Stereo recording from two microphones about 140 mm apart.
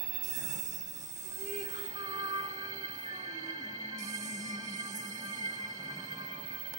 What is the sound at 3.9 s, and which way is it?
Music, 20° right (ahead or behind).